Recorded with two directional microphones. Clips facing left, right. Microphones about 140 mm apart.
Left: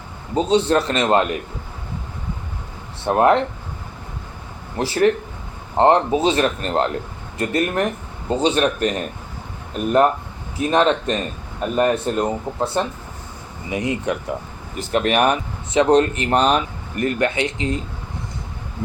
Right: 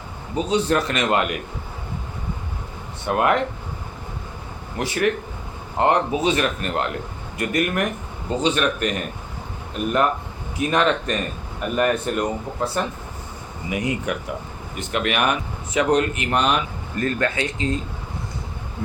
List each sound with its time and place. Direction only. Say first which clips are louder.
0.3 s speech: left 4 dB; 30° left (ahead or behind)
3.1 s speech: left 4 dB; 30° left (ahead or behind)
4.8 s speech: left 5 dB; 30° left (ahead or behind)
10.6 s speech: left 3 dB; 30° left (ahead or behind)
14.8 s speech: left 5 dB; 35° left (ahead or behind)
16.9 s speech: left 3 dB; 20° left (ahead or behind)